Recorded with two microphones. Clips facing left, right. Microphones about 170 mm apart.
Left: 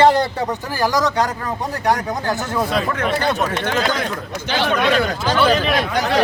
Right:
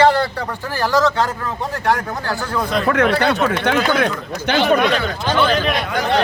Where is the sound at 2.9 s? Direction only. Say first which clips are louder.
Right 4 dB; 70° right (ahead or behind).